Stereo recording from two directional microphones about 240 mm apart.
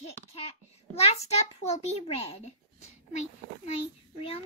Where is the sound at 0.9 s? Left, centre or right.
Left.